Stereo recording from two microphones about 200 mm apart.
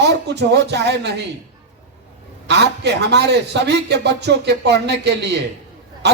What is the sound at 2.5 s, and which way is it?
A man's voice, 60° right (ahead or behind).